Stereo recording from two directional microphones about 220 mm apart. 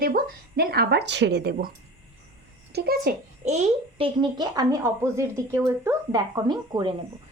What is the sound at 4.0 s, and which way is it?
Speech, 20° right (ahead or behind).